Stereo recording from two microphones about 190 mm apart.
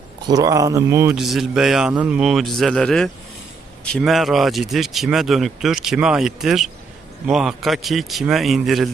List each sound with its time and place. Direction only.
0.3 s speech: 20° right (ahead or behind)
1.1 s speech: centre (ahead or behind)